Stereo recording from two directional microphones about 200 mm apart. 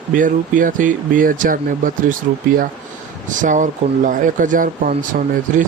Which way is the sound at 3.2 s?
40° right (ahead or behind).